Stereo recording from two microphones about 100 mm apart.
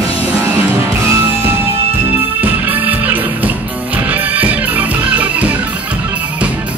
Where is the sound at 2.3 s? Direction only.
15° right (ahead or behind).